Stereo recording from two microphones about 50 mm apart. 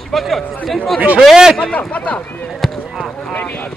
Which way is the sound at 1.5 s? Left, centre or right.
Left.